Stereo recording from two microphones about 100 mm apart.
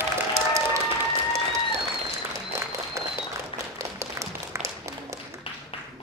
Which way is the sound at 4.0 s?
30° right (ahead or behind).